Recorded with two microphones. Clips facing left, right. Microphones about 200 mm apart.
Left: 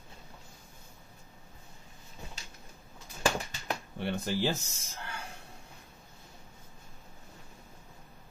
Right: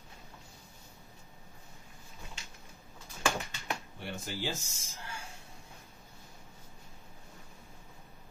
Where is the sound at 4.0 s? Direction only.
65° left (ahead or behind).